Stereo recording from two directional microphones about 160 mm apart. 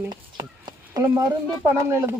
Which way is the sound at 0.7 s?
20° right (ahead or behind).